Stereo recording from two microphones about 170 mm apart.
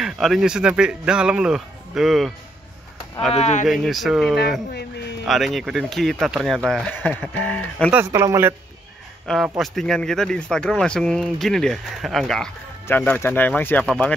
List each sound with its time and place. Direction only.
0.0 s speech: centre (ahead or behind)
3.3 s speech: 40° left (ahead or behind)
3.6 s speech: centre (ahead or behind)
7.9 s speech: 15° right (ahead or behind)
9.6 s speech: 5° left (ahead or behind)